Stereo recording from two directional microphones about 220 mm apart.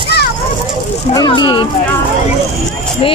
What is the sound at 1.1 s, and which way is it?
Speech, 20° left (ahead or behind).